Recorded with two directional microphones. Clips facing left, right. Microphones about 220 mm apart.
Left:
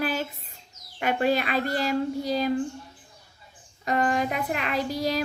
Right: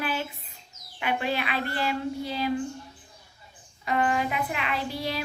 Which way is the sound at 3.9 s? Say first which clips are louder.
Left 1 dB; 40° left (ahead or behind).